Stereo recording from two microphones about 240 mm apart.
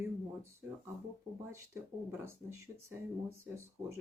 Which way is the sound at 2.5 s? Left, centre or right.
Right.